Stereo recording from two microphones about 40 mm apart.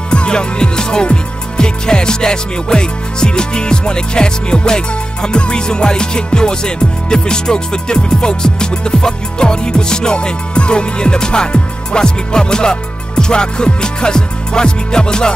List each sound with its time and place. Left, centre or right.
0.1 s speech: left